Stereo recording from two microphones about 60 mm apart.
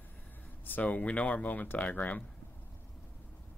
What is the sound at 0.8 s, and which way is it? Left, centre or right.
Speech, left.